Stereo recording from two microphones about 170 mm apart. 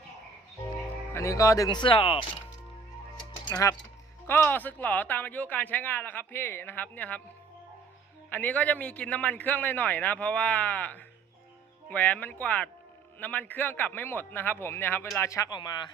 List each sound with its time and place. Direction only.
1.1 s speech: 15° left (ahead or behind)
3.4 s speech: 20° left (ahead or behind)
8.3 s speech: 10° left (ahead or behind); by 15.9 s 25° left (ahead or behind)